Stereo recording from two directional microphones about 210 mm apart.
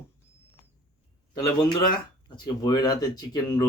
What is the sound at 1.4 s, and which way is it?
Speech, 20° left (ahead or behind).